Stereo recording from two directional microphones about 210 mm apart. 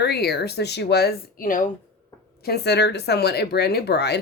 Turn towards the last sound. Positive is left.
turn(degrees=50)  # may be behind; listen again after turning